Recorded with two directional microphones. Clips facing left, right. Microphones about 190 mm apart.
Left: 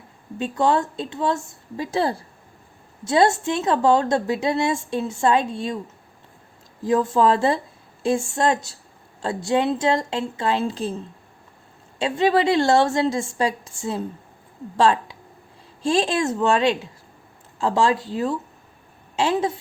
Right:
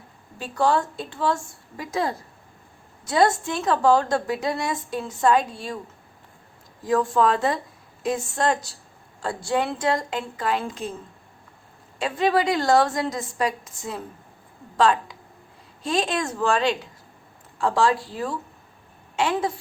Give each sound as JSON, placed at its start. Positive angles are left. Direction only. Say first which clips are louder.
{"t": 0.3, "sound": "a woman's voice", "louder": "left 2 dB", "side_deg": 20}
{"t": 6.8, "sound": "a woman's voice", "louder": "left 2 dB", "side_deg": 25}
{"t": 11.9, "sound": "a woman's voice", "louder": "left 3 dB", "side_deg": 25}